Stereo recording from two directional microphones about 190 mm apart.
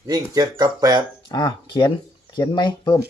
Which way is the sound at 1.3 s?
20° left (ahead or behind).